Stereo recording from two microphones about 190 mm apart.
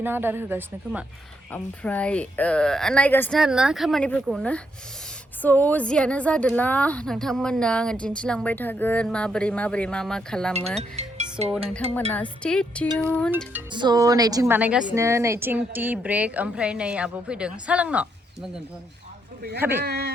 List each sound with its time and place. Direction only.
0.0 s a woman's voice: 10° right (ahead or behind)
1.5 s speech: 5° left (ahead or behind)
3.3 s a woman's voice: 5° right (ahead or behind)
10.8 s music: 35° right (ahead or behind)
11.7 s a woman's voice: 5° left (ahead or behind)
13.7 s a woman's voice: 20° right (ahead or behind)
19.5 s a woman's voice: 10° right (ahead or behind)
19.8 s speech: 60° right (ahead or behind)